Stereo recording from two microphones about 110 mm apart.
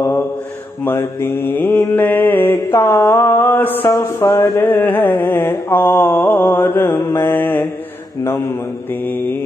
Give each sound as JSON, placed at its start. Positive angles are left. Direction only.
{"t": 0.8, "sound": "mantra", "side_deg": 20}